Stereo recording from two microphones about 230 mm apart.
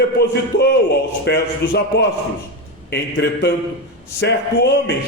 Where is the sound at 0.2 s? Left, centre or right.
Left.